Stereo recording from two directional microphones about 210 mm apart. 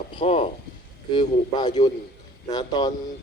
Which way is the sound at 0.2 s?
25° left (ahead or behind).